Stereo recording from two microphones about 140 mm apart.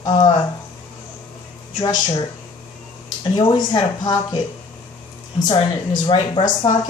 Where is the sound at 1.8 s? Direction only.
35° left (ahead or behind).